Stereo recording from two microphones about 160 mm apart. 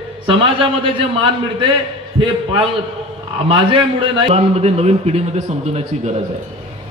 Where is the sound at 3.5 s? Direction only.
30° right (ahead or behind).